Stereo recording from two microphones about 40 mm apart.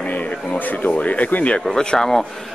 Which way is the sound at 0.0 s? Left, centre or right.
Left.